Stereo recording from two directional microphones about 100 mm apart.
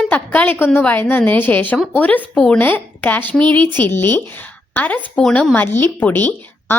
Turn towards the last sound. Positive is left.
turn(degrees=25)  # may be behind; listen again after turning